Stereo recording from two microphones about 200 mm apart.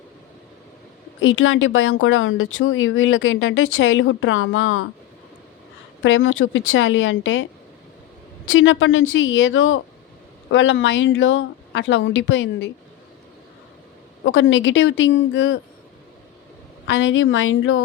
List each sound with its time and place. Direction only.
1.2 s speech: 75° left (ahead or behind)
6.0 s speech: 75° left (ahead or behind)
8.4 s speech: 75° left (ahead or behind)
14.3 s speech: 70° left (ahead or behind)
16.8 s speech: 70° left (ahead or behind); by 17.8 s 85° left